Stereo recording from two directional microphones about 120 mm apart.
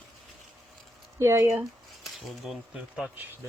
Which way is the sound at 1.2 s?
20° right (ahead or behind).